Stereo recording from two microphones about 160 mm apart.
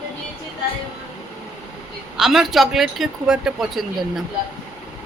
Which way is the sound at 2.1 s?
Centre (ahead or behind).